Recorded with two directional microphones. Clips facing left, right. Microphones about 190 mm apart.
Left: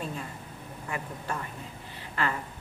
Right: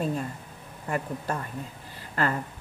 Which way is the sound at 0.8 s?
40° right (ahead or behind).